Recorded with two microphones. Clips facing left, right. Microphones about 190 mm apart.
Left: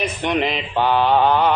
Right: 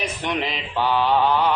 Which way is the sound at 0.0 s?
60° left (ahead or behind).